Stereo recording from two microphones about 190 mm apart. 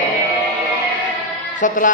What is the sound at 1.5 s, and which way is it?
Speech, 45° left (ahead or behind).